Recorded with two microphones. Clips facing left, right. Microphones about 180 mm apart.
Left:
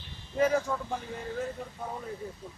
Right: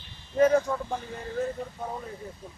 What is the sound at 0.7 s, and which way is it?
Speech, 20° right (ahead or behind).